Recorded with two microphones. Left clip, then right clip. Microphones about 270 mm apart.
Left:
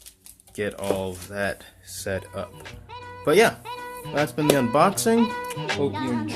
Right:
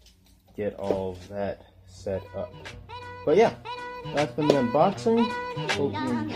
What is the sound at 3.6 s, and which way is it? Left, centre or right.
Speech, centre.